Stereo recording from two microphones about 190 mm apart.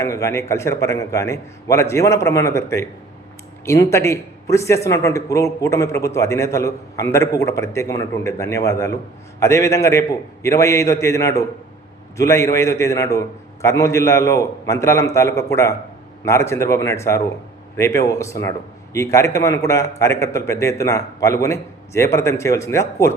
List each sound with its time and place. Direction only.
0.0 s a man's voice: 15° left (ahead or behind)